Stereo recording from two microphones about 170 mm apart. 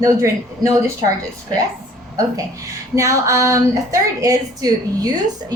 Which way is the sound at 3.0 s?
15° right (ahead or behind).